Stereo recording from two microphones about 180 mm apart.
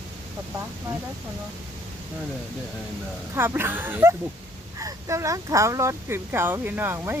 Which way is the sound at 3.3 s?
15° right (ahead or behind).